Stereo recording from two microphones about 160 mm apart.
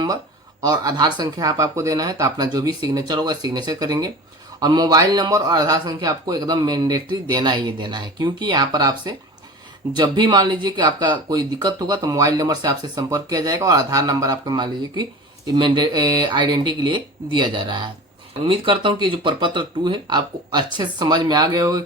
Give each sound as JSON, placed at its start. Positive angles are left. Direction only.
{"t": 0.6, "sound": "speech", "side_deg": -25}